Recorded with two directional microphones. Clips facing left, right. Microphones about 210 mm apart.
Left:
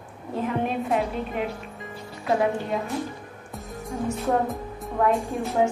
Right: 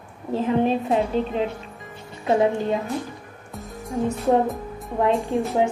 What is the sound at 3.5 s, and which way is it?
Music, centre (ahead or behind).